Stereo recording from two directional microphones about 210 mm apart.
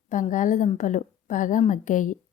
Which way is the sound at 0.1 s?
35° left (ahead or behind).